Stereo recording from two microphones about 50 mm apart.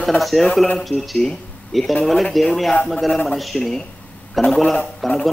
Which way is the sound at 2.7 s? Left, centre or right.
Centre.